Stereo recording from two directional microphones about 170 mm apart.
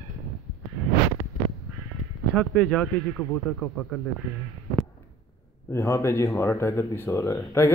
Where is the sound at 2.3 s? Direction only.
5° left (ahead or behind).